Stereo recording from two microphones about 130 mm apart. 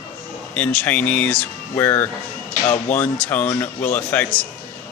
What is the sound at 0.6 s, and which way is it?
Speech, 10° left (ahead or behind).